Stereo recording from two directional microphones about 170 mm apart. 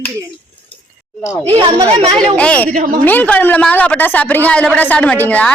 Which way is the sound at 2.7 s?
50° right (ahead or behind).